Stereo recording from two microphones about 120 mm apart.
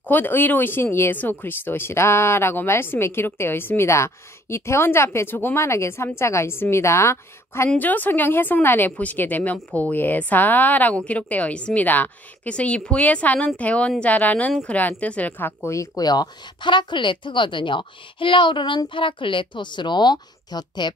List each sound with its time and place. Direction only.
0.0 s a woman's voice: 15° left (ahead or behind)
16.0 s speech: 35° left (ahead or behind)